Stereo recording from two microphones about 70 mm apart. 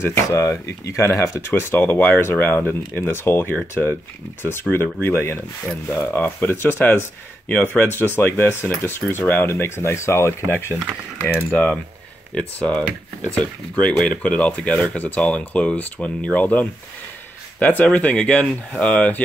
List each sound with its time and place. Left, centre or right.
0.0 s speech: left
1.5 s speech: left
3.8 s speech: left
4.4 s speech: left
9.5 s speech: left
11.5 s speech: centre